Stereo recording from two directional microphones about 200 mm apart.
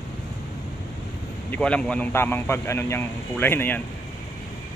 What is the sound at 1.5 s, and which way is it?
Speech, 5° left (ahead or behind).